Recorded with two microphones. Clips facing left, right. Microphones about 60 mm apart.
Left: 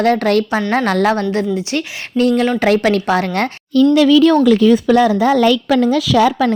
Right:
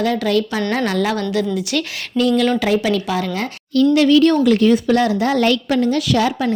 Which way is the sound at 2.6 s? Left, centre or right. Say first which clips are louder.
Left 4 dB; left.